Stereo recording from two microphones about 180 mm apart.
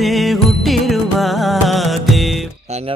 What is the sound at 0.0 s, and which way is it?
Music, centre (ahead or behind).